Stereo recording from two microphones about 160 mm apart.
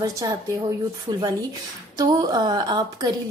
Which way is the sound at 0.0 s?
20° right (ahead or behind).